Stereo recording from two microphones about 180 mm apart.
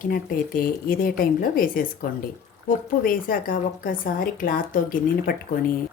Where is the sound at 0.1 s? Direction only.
50° left (ahead or behind).